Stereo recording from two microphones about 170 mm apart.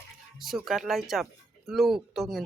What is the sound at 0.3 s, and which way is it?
Speech, centre (ahead or behind).